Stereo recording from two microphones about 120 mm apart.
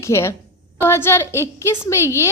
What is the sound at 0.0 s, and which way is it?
A woman's voice, 25° left (ahead or behind).